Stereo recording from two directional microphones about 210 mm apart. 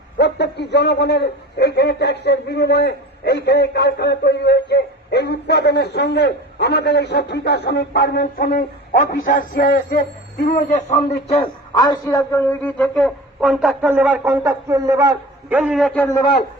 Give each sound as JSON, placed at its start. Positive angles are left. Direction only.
{"t": 0.2, "sound": "a man's voice", "side_deg": 55}
{"t": 16.0, "sound": "a man's voice", "side_deg": 15}